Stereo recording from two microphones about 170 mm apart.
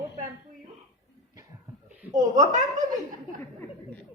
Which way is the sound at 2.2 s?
45° right (ahead or behind).